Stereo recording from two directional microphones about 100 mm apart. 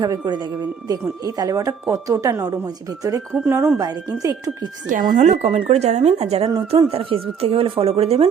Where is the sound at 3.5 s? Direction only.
20° right (ahead or behind).